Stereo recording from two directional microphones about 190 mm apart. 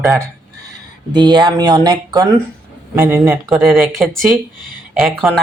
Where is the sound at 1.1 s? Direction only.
25° right (ahead or behind).